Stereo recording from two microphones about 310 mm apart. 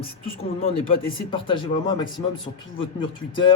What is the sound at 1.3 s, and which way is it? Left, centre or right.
Speech, centre.